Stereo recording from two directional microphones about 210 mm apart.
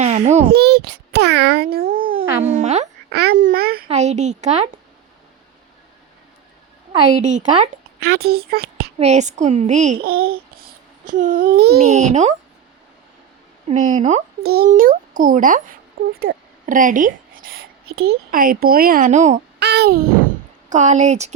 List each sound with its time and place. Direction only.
0.5 s a child's voice: 50° right (ahead or behind)
2.1 s speech: 30° right (ahead or behind)
3.1 s speech: 50° right (ahead or behind)
3.8 s a woman's voice: 35° right (ahead or behind)
7.2 s a woman's voice: 35° right (ahead or behind)
8.0 s speech: 50° right (ahead or behind)
9.0 s a woman's voice: 35° right (ahead or behind)
10.0 s babbling: 45° right (ahead or behind)
11.8 s a woman's voice: 30° right (ahead or behind)
13.7 s a woman's voice: 35° right (ahead or behind)
14.4 s a woman's voice: 50° right (ahead or behind)
19.5 s a child's voice: 50° right (ahead or behind)
20.7 s a woman's voice: 35° right (ahead or behind)